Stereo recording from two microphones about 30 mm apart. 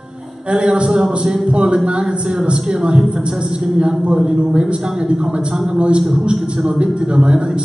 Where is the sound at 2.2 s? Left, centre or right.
Right.